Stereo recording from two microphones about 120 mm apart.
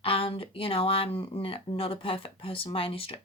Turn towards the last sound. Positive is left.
turn(degrees=50)  # may be behind; listen again after turning